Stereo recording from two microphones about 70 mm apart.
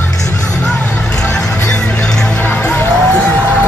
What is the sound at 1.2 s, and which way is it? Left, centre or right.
Music, centre.